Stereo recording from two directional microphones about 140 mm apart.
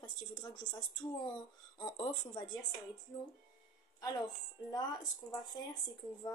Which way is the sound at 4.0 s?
30° left (ahead or behind).